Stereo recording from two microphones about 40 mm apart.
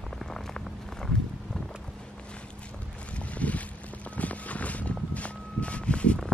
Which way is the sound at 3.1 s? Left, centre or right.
Left.